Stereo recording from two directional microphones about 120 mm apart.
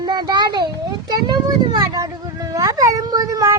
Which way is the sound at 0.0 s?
35° right (ahead or behind).